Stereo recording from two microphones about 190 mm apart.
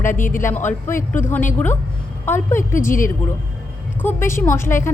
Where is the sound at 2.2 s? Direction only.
10° left (ahead or behind).